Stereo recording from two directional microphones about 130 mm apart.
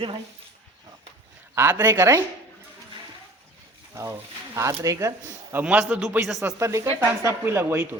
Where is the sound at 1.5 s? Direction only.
15° right (ahead or behind).